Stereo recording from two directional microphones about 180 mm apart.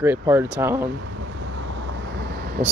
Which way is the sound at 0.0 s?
10° right (ahead or behind).